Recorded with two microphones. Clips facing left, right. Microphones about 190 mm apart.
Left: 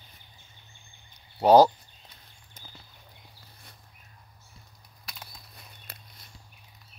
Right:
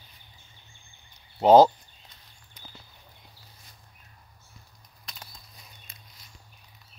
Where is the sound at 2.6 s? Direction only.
45° left (ahead or behind).